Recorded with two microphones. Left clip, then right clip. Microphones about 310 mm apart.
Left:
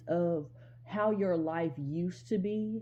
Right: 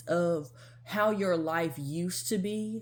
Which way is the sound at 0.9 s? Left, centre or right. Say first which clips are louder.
Right 3 dB; right.